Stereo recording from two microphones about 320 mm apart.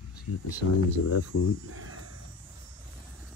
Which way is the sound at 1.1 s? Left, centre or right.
Left.